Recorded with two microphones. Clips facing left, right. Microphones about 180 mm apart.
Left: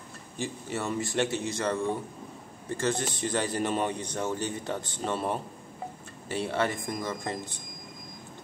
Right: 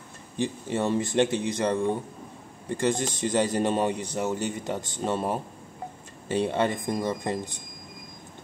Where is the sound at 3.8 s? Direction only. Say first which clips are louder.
Right 3 dB; 10° right (ahead or behind).